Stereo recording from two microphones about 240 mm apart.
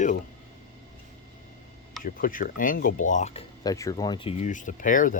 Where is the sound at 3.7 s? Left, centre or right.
Centre; by 5.2 s left.